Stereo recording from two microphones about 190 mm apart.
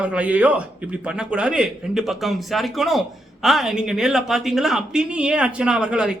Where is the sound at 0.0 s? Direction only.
5° right (ahead or behind).